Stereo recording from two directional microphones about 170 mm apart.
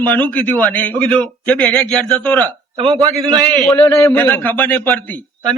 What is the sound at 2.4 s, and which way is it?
Speech, 30° right (ahead or behind).